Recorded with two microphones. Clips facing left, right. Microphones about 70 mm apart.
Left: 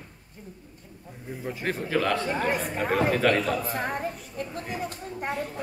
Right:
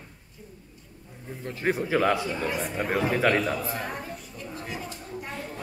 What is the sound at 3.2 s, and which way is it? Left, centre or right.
Speech, centre.